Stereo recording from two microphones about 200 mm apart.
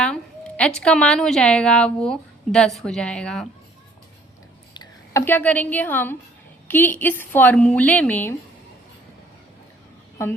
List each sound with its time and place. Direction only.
0.0 s a woman's voice: 5° left (ahead or behind)
4.7 s a sound: 20° left (ahead or behind)
5.2 s a woman's voice: 10° left (ahead or behind)